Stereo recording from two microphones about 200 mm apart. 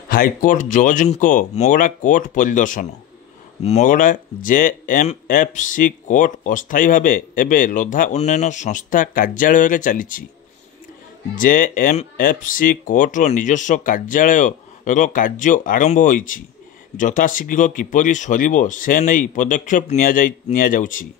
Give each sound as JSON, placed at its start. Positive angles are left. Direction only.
{"t": 0.1, "sound": "speech", "side_deg": 45}
{"t": 11.3, "sound": "speech", "side_deg": 45}